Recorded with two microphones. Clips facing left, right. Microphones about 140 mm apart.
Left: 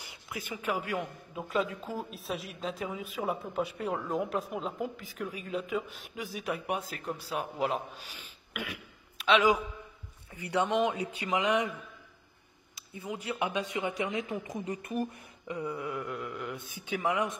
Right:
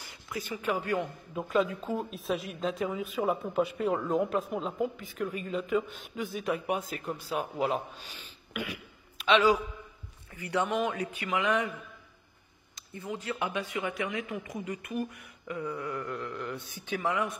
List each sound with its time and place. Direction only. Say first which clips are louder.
0.0 s a man's voice: right 3 dB; 15° left (ahead or behind)
8.1 s throat clearing: right 3 dB; 10° left (ahead or behind)
9.2 s a man's voice: right 1 dB; 5° left (ahead or behind)
12.7 s speech: right 1 dB; 10° left (ahead or behind)